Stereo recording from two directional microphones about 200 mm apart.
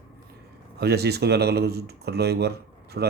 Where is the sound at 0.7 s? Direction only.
55° right (ahead or behind).